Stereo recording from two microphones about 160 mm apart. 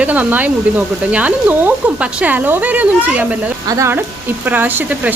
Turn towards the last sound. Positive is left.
turn(degrees=-10)  # may be behind; listen again after turning